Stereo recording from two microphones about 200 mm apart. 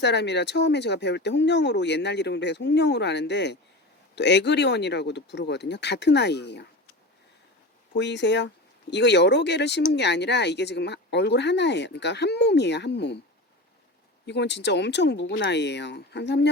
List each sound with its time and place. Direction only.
0.0 s speech: 60° left (ahead or behind)
7.9 s speech: 60° left (ahead or behind)
14.3 s speech: 60° left (ahead or behind)